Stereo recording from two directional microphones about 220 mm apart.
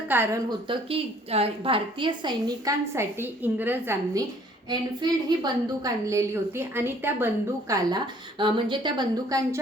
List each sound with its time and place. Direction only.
0.1 s a woman's voice: 10° right (ahead or behind)
0.7 s a woman's voice: 25° right (ahead or behind)